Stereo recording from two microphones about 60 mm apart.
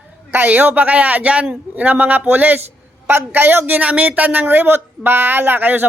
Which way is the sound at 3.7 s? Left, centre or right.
Right.